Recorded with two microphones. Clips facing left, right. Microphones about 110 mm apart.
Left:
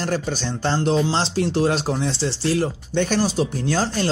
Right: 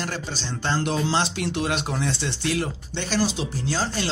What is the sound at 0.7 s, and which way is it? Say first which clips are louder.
Speech: left 3 dB; 35° left (ahead or behind).